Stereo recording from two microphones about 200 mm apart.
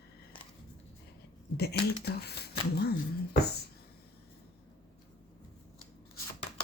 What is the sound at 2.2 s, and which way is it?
Speech, 55° left (ahead or behind).